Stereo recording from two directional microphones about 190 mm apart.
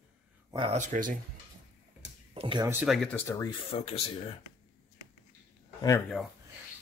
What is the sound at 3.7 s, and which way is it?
Speech, 30° left (ahead or behind).